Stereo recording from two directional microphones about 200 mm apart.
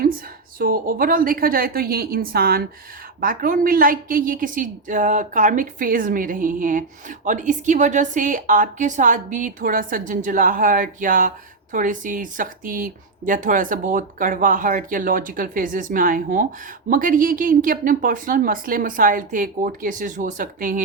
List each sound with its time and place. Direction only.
0.6 s speech: 45° right (ahead or behind)